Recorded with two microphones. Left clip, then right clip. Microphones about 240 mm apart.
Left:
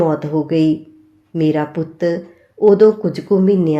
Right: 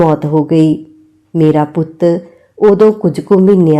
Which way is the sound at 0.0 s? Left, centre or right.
Right.